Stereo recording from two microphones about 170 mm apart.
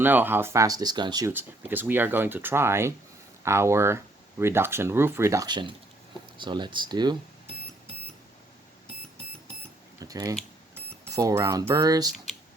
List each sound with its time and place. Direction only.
0.0 s speech: 10° right (ahead or behind)
1.3 s speech: 10° right (ahead or behind)
10.0 s a sound: 20° right (ahead or behind)
11.1 s speech: 20° right (ahead or behind)